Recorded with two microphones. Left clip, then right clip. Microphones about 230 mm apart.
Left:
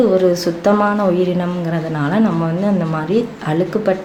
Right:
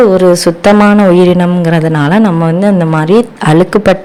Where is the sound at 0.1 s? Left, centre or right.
Right.